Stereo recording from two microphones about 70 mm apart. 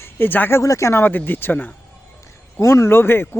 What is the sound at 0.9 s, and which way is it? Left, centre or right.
Speech, left.